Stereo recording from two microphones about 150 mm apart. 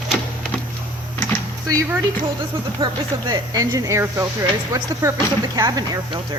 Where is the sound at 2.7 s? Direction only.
35° right (ahead or behind).